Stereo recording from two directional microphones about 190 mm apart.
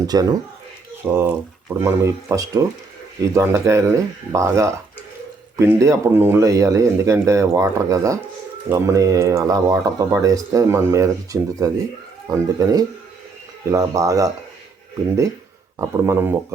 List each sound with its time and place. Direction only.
0.1 s speech: 20° right (ahead or behind)
15.8 s speech: 15° right (ahead or behind)